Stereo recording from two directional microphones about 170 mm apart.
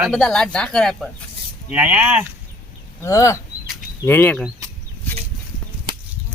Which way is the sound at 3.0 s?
15° left (ahead or behind).